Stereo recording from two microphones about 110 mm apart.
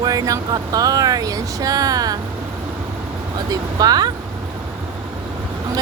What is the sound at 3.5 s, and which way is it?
Speech, 35° right (ahead or behind).